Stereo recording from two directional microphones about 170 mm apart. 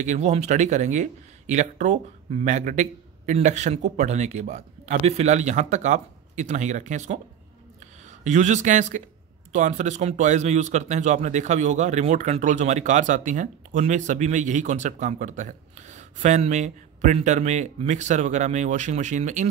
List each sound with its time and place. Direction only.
0.0 s speech: 45° right (ahead or behind)
8.2 s speech: 45° right (ahead or behind)